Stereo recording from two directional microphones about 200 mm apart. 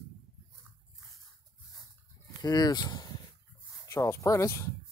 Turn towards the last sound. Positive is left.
turn(degrees=15)  # may be behind; listen again after turning